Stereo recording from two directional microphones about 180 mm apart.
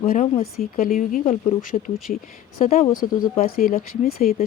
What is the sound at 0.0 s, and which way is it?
A woman's voice, 50° left (ahead or behind).